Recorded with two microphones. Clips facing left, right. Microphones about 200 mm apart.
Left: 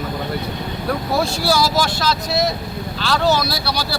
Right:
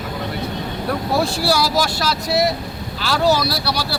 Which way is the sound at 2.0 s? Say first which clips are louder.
Right 1 dB; 10° right (ahead or behind).